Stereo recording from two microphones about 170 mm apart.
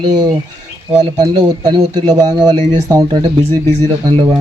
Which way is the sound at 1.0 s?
25° right (ahead or behind).